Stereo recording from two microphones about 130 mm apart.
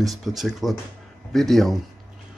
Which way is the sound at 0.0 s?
Centre (ahead or behind).